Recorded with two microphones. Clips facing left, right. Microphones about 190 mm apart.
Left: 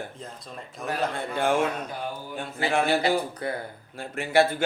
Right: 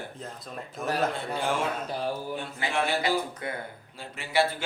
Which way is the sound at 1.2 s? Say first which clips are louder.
Left 4 dB; 55° left (ahead or behind).